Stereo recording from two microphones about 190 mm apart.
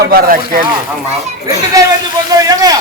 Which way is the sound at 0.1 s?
50° right (ahead or behind).